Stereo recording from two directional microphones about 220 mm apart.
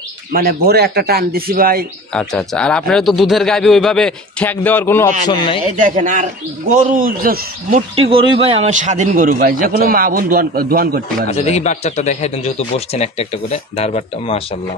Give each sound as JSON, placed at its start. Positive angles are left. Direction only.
{"t": 0.3, "sound": "speech", "side_deg": -45}
{"t": 2.1, "sound": "speech", "side_deg": 5}
{"t": 5.8, "sound": "a man's voice", "side_deg": -35}
{"t": 7.9, "sound": "a man's voice", "side_deg": -25}
{"t": 11.2, "sound": "speech", "side_deg": 30}